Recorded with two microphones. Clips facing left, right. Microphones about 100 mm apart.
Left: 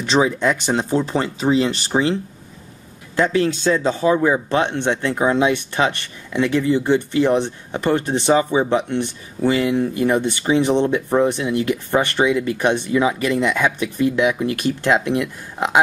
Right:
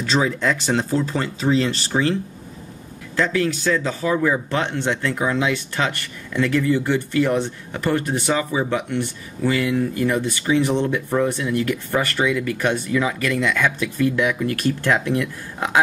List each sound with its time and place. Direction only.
0.0 s speech: 20° left (ahead or behind)
3.2 s speech: 25° left (ahead or behind)